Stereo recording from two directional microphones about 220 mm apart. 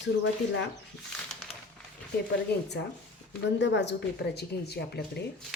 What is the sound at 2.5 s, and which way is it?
A woman's voice, 50° left (ahead or behind).